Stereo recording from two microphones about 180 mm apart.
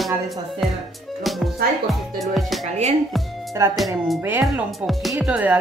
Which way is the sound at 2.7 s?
40° right (ahead or behind).